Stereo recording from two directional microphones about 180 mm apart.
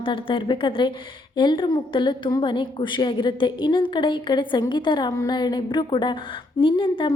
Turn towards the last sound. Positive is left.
turn(degrees=25)  # may be behind; listen again after turning